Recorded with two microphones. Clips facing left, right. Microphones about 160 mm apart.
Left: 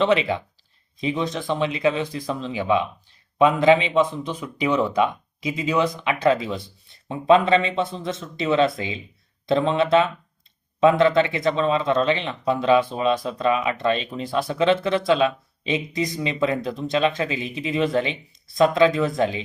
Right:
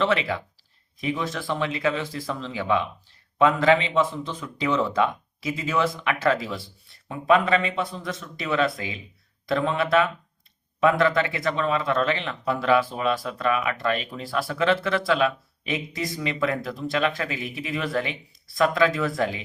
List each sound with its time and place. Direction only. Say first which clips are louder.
0.0 s speech: left 4 dB; 20° left (ahead or behind)